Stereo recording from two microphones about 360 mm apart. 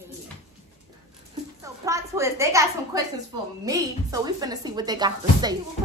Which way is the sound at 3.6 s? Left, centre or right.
Centre.